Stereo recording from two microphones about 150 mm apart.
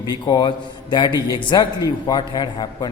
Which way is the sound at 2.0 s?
30° left (ahead or behind).